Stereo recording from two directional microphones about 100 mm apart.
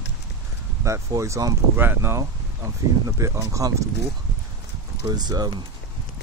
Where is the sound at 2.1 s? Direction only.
30° right (ahead or behind).